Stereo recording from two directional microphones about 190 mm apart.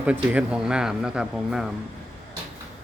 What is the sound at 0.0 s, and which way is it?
Speech, 5° right (ahead or behind).